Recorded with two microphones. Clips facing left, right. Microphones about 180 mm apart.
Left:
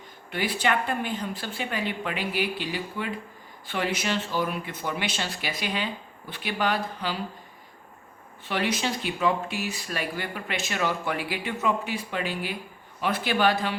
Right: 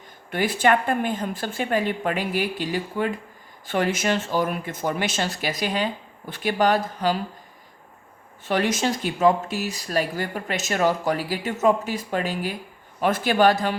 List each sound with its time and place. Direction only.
0.3 s a woman's voice: 45° right (ahead or behind)
8.4 s a woman's voice: 45° right (ahead or behind)